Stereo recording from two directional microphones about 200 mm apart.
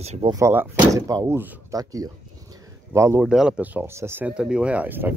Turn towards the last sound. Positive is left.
turn(degrees=-10)  # may be behind; listen again after turning